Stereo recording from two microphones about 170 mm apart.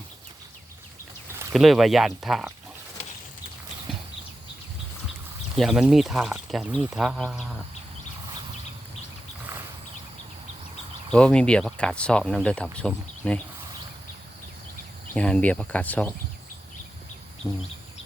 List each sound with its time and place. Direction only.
1.5 s speech: centre (ahead or behind)
5.5 s speech: 5° right (ahead or behind)
11.1 s speech: 5° left (ahead or behind)
15.1 s speech: 5° left (ahead or behind)
17.4 s a sound: 20° left (ahead or behind)